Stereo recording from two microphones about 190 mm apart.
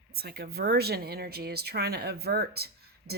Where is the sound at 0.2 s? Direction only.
55° right (ahead or behind).